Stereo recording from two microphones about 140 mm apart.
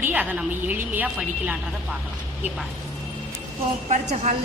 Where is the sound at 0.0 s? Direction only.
10° right (ahead or behind).